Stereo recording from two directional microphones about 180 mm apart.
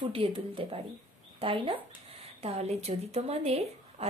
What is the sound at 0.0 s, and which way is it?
Speech, 30° right (ahead or behind).